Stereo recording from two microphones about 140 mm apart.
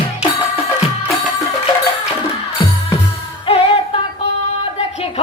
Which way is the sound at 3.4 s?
45° left (ahead or behind).